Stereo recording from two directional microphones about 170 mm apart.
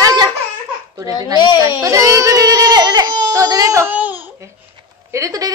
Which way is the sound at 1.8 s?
20° right (ahead or behind).